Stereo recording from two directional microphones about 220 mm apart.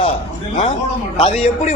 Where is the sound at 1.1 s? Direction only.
30° left (ahead or behind).